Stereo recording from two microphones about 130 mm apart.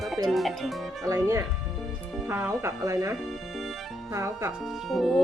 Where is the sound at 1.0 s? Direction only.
25° right (ahead or behind).